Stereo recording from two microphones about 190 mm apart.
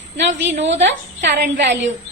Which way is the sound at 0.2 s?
70° right (ahead or behind).